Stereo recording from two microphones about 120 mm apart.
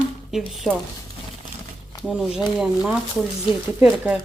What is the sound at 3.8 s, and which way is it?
Speech, 10° right (ahead or behind).